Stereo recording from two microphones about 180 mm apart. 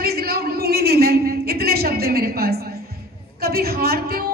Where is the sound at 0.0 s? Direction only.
55° right (ahead or behind).